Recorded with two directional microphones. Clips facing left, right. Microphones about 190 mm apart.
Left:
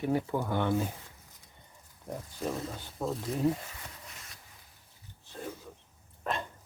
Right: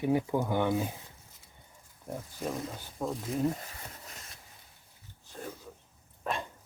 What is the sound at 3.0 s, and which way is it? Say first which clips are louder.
Speech: left 1 dB; 5° left (ahead or behind).